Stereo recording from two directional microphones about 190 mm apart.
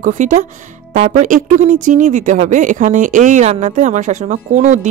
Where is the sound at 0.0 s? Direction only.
40° right (ahead or behind).